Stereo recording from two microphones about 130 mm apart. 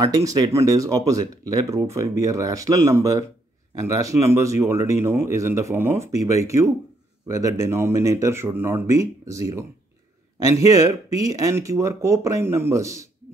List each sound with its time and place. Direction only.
0.0 s speech: 30° right (ahead or behind)
10.7 s speech: 25° right (ahead or behind)